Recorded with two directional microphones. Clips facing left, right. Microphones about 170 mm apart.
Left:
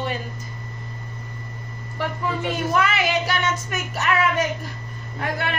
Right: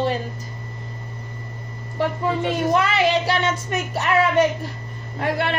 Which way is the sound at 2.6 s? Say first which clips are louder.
Right 3 dB; 30° right (ahead or behind).